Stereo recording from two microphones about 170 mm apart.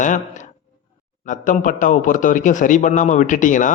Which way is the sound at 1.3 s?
50° left (ahead or behind).